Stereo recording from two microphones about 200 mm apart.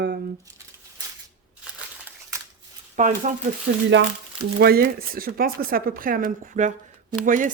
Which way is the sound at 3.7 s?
50° right (ahead or behind).